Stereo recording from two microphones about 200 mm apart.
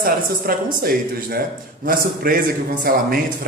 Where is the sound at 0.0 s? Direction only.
45° right (ahead or behind).